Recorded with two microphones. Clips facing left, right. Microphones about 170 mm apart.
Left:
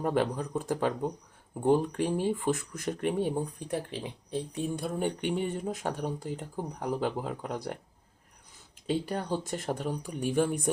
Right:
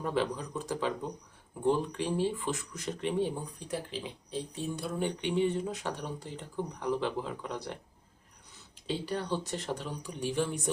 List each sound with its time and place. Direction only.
0.0 s speech: 50° left (ahead or behind)
8.9 s speech: 45° left (ahead or behind)